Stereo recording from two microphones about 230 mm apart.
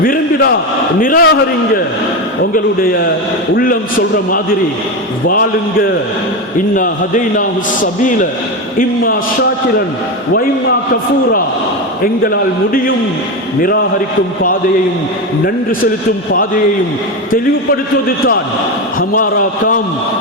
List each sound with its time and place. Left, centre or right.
0.0 s a man's voice: left
3.5 s a man's voice: left
6.7 s a man's voice: left
12.2 s a man's voice: left
18.9 s a man's voice: left